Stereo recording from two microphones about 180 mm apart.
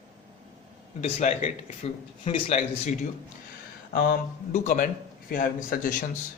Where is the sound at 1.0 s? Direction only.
40° left (ahead or behind).